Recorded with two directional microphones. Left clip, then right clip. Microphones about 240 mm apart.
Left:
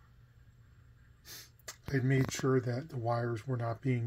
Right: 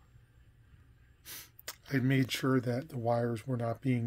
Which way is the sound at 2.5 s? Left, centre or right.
Centre.